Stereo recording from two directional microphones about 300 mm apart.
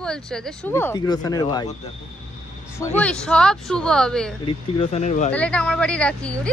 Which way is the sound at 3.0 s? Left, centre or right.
Centre.